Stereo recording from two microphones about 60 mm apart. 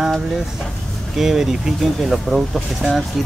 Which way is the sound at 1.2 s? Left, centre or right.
Centre.